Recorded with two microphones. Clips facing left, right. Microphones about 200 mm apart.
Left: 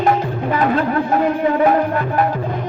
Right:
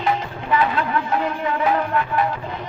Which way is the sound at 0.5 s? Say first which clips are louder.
Left 3 dB; 45° left (ahead or behind).